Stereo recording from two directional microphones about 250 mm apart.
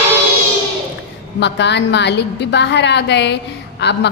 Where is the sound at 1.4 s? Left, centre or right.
Left.